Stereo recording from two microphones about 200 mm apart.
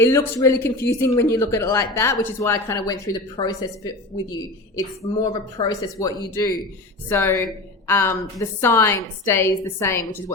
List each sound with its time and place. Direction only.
0.0 s speech: 10° left (ahead or behind)
5.2 s speech: 20° left (ahead or behind)